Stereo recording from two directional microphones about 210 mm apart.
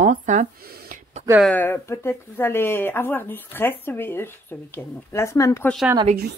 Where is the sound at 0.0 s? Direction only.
35° right (ahead or behind).